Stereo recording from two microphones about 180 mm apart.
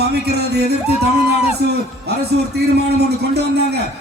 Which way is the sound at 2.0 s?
65° right (ahead or behind).